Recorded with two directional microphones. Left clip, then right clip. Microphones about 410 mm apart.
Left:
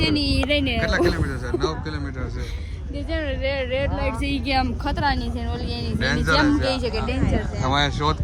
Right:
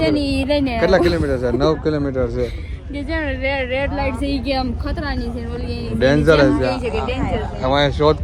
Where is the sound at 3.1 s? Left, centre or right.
Centre.